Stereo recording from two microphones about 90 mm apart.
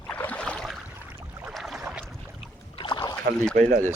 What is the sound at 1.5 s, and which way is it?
Boat, centre (ahead or behind).